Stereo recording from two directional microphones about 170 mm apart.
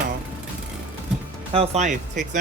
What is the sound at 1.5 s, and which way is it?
Speech, 40° right (ahead or behind).